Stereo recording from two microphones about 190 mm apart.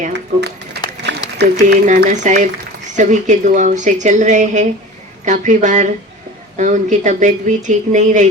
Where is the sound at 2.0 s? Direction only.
40° right (ahead or behind).